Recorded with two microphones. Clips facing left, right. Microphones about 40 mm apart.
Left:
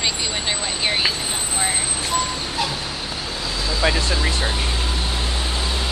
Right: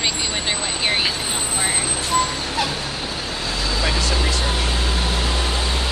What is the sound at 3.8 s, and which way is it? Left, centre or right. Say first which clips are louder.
Speech: left 3 dB; left.